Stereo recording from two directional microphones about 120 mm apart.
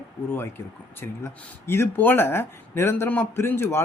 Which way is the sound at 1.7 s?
20° left (ahead or behind).